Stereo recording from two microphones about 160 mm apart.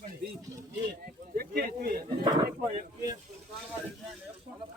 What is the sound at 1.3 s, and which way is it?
Speech, 70° right (ahead or behind).